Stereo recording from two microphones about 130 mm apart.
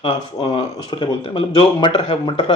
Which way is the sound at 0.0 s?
40° left (ahead or behind).